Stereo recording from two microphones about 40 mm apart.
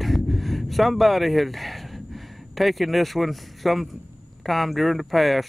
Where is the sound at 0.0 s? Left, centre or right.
Centre.